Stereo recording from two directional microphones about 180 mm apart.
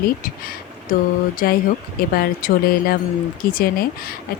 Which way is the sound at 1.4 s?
55° left (ahead or behind).